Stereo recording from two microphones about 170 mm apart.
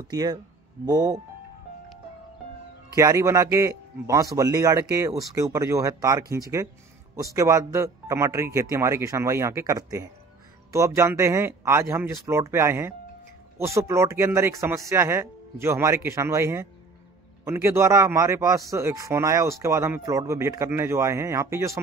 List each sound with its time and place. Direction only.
0.1 s a man's voice: 20° right (ahead or behind)
2.9 s a man's voice: 20° right (ahead or behind)